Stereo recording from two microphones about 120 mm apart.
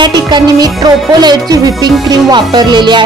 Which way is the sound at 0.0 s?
40° right (ahead or behind).